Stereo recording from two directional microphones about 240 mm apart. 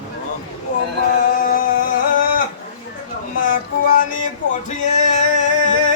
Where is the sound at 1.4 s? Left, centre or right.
Left.